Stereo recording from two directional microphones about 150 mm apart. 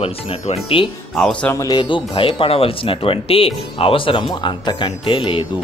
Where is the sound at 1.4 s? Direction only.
20° left (ahead or behind).